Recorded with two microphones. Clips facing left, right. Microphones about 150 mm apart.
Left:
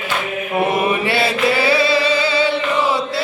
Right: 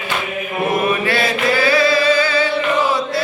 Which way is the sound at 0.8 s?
25° left (ahead or behind).